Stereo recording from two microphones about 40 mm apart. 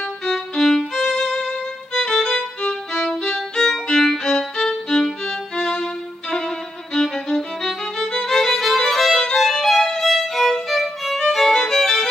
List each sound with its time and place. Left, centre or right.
0.2 s violin: centre
2.0 s music: centre
6.3 s violin: centre